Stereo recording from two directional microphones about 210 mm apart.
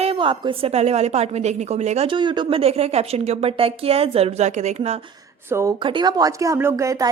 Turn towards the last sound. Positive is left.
turn(degrees=-15)  # may be behind; listen again after turning